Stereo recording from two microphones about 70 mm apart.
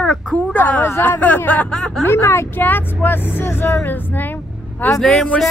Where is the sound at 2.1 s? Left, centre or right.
Left.